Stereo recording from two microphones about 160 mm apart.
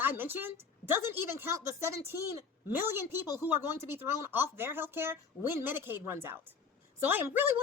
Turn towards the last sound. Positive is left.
turn(degrees=-10)  # may be behind; listen again after turning